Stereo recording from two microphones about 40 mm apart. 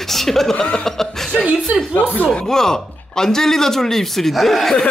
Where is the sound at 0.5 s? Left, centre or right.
Left.